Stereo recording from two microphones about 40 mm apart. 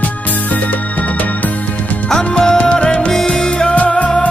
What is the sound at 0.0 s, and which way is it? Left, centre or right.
Music, left.